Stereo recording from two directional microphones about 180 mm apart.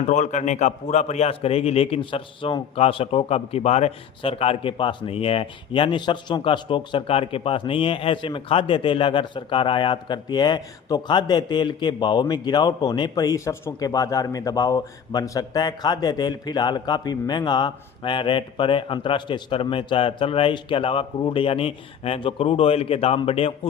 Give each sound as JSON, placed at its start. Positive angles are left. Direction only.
{"t": 0.1, "sound": "a man's voice", "side_deg": 45}